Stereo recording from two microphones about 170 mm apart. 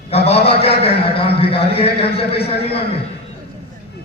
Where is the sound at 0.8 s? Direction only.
35° left (ahead or behind).